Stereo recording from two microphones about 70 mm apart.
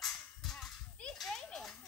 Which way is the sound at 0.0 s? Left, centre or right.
Centre.